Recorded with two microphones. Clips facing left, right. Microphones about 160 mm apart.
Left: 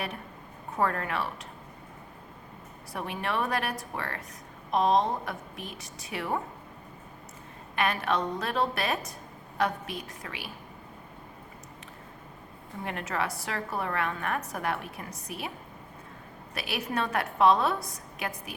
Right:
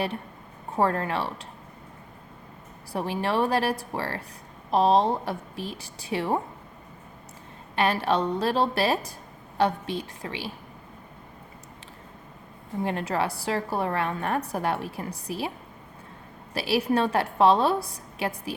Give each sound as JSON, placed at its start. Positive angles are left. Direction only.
{"t": 0.7, "sound": "a woman's voice", "side_deg": -30}
{"t": 2.9, "sound": "a woman's voice", "side_deg": -30}
{"t": 7.8, "sound": "a woman's voice", "side_deg": -30}
{"t": 12.8, "sound": "a woman's voice", "side_deg": -30}
{"t": 16.6, "sound": "a woman's voice", "side_deg": -30}